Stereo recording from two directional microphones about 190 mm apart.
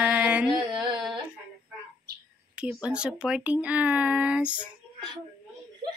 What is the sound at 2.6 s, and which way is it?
A woman's voice, 5° right (ahead or behind).